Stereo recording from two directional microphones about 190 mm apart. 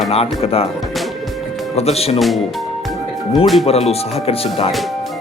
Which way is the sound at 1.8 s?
35° left (ahead or behind).